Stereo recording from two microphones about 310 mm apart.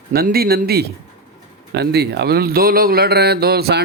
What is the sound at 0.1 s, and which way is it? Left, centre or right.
Speech, right.